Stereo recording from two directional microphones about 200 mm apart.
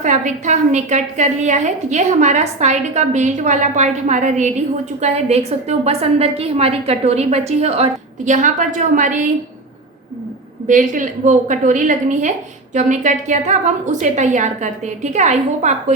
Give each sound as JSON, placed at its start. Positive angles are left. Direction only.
{"t": 0.0, "sound": "a woman's voice", "side_deg": -35}
{"t": 10.7, "sound": "a woman's voice", "side_deg": -40}